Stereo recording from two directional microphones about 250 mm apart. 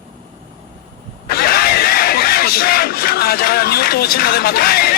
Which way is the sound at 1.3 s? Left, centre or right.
Left.